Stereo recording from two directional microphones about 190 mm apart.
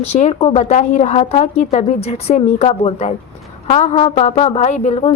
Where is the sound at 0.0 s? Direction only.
35° left (ahead or behind).